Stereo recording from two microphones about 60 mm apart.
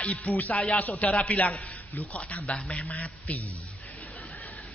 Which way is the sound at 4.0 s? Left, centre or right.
Left.